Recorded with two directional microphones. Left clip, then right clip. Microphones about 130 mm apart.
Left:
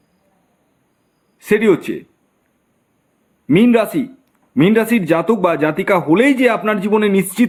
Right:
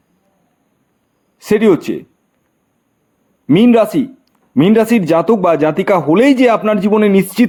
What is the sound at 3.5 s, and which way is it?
A man's voice, 45° right (ahead or behind).